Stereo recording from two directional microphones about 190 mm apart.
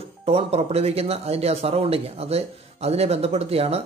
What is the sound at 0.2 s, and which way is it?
Speech, 30° right (ahead or behind).